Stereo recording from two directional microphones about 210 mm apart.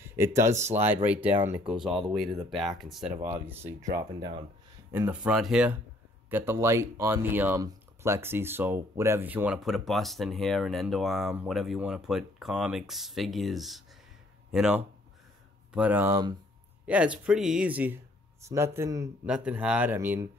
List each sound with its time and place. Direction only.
0.0 s speech: 10° right (ahead or behind)
4.9 s speech: 10° right (ahead or behind)
16.8 s speech: 5° right (ahead or behind)